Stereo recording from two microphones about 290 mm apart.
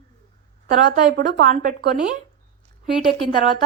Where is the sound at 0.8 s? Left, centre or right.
Centre.